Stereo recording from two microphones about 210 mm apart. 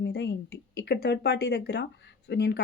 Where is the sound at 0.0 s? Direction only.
55° left (ahead or behind).